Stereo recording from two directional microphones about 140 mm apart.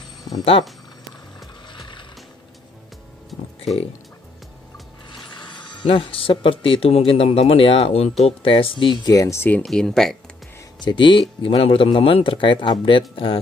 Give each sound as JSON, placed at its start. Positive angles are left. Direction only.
{"t": 1.7, "sound": "music", "side_deg": 35}
{"t": 3.3, "sound": "a sound", "side_deg": 0}
{"t": 5.2, "sound": "speech", "side_deg": 35}
{"t": 10.8, "sound": "speech", "side_deg": 35}